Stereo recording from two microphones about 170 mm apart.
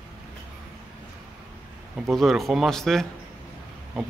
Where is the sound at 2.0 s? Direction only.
Centre (ahead or behind).